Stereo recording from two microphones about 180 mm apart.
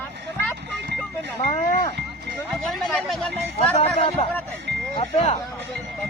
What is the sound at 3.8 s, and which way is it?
A man's voice, 35° left (ahead or behind).